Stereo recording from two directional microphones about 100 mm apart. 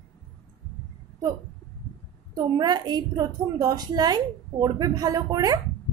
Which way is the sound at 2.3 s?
40° right (ahead or behind).